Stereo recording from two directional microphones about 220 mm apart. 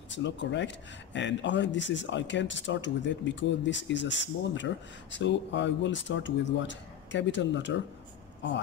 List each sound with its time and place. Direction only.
0.1 s speech: 55° left (ahead or behind)